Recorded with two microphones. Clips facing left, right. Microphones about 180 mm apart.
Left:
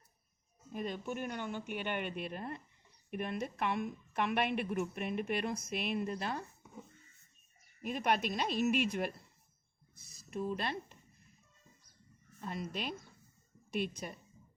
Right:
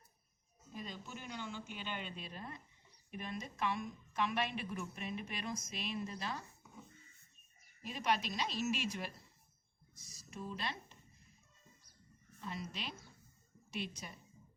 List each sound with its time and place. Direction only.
0.7 s a woman's voice: 55° left (ahead or behind)
7.8 s a woman's voice: 55° left (ahead or behind)
12.4 s a woman's voice: 50° left (ahead or behind)